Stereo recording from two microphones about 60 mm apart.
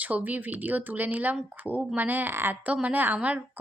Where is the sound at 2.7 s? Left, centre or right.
Right.